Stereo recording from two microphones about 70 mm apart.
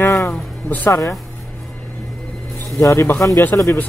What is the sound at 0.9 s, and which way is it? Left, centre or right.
Speech, left.